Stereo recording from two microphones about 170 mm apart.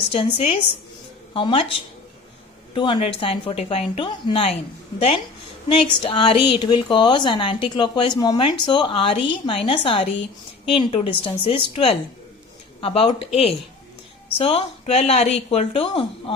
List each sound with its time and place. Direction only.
0.1 s a woman's voice: 35° left (ahead or behind)
2.7 s a woman's voice: 30° left (ahead or behind)